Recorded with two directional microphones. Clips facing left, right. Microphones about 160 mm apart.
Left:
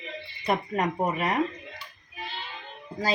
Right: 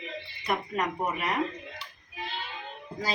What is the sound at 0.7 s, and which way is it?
Speech, 45° left (ahead or behind).